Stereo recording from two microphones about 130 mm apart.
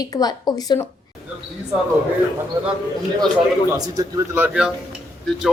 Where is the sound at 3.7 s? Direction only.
30° right (ahead or behind).